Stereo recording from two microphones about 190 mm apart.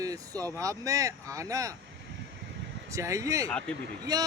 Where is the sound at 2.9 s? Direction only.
15° right (ahead or behind).